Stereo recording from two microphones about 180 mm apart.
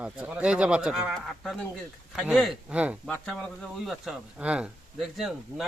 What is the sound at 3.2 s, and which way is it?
Speech, 5° left (ahead or behind).